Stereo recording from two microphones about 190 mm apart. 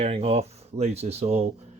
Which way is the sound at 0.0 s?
30° right (ahead or behind).